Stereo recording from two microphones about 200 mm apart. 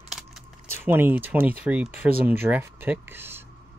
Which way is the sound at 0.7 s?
10° right (ahead or behind).